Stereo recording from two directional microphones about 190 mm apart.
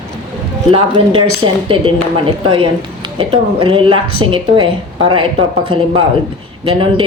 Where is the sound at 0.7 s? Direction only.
30° right (ahead or behind).